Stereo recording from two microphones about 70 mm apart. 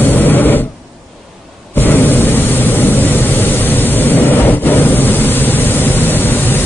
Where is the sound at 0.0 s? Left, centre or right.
Left.